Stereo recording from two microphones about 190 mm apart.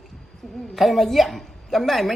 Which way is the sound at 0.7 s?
Centre (ahead or behind).